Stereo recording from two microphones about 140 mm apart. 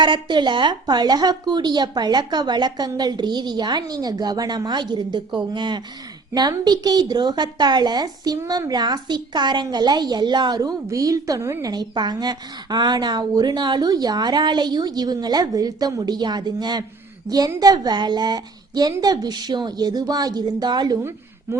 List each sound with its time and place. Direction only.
0.0 s a woman's voice: 35° right (ahead or behind)
21.5 s a woman's voice: 20° right (ahead or behind)